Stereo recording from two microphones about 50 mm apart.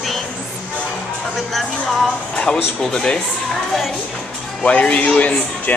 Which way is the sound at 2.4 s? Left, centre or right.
Centre.